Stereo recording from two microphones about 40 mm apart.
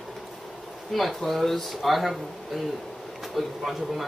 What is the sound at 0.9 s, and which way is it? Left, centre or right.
Speech, centre.